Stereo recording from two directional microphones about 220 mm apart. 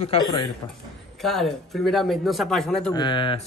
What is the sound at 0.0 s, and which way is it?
Speech, 25° left (ahead or behind).